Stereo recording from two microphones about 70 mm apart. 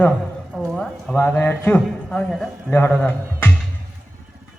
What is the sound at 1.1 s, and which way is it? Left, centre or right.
Speech, left.